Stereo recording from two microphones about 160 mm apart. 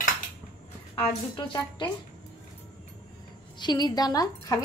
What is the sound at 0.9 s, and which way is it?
Speech, 30° left (ahead or behind).